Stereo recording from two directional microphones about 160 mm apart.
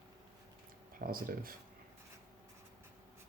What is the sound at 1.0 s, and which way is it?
Speech, 65° right (ahead or behind).